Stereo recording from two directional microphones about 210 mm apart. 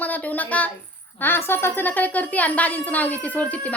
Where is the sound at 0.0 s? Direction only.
5° left (ahead or behind).